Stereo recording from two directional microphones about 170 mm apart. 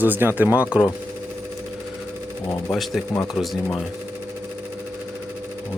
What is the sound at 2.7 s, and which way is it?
Speech, centre (ahead or behind).